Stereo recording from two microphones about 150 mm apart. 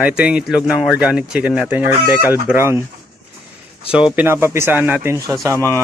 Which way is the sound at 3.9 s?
10° right (ahead or behind).